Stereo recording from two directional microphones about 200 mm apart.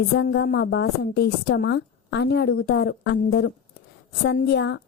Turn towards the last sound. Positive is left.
turn(degrees=60)  # may be behind; listen again after turning